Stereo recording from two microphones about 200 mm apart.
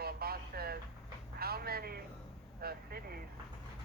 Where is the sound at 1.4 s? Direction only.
50° right (ahead or behind).